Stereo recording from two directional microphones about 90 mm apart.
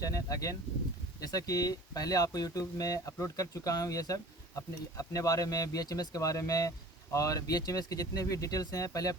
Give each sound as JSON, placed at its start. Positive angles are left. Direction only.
{"t": 0.0, "sound": "speech", "side_deg": 40}